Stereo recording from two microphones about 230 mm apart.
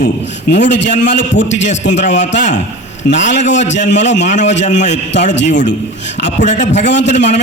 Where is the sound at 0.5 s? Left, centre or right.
Left.